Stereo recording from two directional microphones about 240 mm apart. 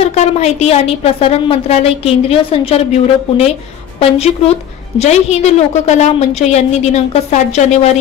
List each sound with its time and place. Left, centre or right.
0.0 s a woman's voice: left